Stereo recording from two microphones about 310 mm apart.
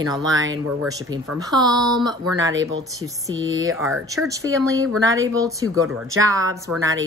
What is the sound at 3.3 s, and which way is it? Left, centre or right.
Speech, right.